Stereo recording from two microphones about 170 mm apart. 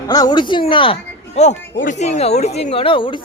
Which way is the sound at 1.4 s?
45° left (ahead or behind).